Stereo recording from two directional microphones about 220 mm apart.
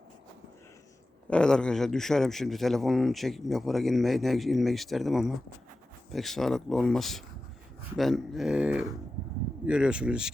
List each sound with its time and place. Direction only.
1.3 s speech: 5° left (ahead or behind)